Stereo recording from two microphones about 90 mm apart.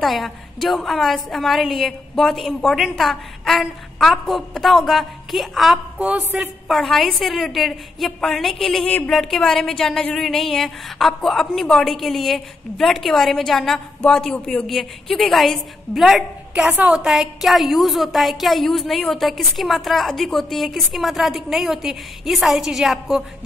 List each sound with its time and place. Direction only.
0.0 s a woman's voice: centre (ahead or behind)
5.9 s a sound: 15° right (ahead or behind)
6.3 s a woman's voice: centre (ahead or behind)
8.8 s speech: 15° left (ahead or behind)
9.1 s a woman's voice: 5° left (ahead or behind)
16.5 s a woman's voice: 15° right (ahead or behind)
17.0 s a woman's voice: 5° right (ahead or behind)